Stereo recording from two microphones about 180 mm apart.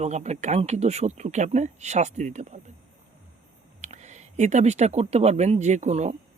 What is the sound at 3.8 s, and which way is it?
Speech, 40° right (ahead or behind).